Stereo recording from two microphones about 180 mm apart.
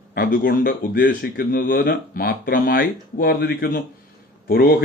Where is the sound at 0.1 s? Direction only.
50° left (ahead or behind).